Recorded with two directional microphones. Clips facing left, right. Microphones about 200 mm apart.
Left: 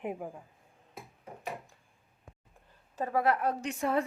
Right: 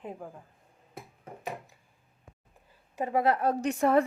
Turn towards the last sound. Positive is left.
turn(degrees=-55)  # may be behind; listen again after turning